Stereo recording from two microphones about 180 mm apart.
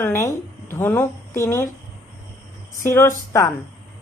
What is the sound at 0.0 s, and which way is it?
A woman's voice, 15° left (ahead or behind).